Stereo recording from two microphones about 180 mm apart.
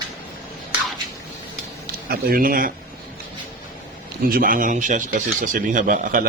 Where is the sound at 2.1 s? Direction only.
55° right (ahead or behind).